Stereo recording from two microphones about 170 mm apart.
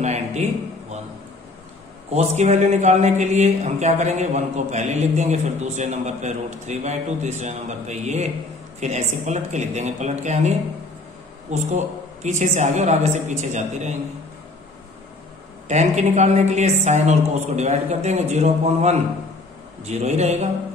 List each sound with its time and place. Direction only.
0.0 s a sound: 40° right (ahead or behind)
2.1 s a man's voice: 45° right (ahead or behind)
11.5 s a man's voice: 40° right (ahead or behind)
15.7 s a man's voice: 45° right (ahead or behind)